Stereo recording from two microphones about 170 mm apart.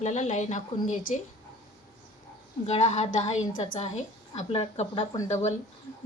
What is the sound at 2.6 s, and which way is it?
A woman's voice, 40° left (ahead or behind).